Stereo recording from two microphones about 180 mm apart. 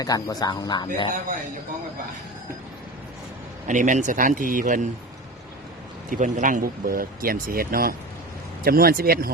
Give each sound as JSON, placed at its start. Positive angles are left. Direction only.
{"t": 0.0, "sound": "speech", "side_deg": 20}
{"t": 3.7, "sound": "speech", "side_deg": -45}
{"t": 6.1, "sound": "speech", "side_deg": -45}